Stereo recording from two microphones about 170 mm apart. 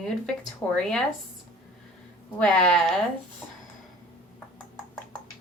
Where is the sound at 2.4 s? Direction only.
5° left (ahead or behind).